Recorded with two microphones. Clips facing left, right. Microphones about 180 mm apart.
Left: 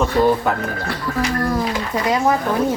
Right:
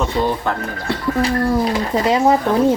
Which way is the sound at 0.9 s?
30° right (ahead or behind).